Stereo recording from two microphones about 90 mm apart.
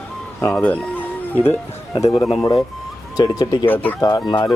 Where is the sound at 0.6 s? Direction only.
15° left (ahead or behind).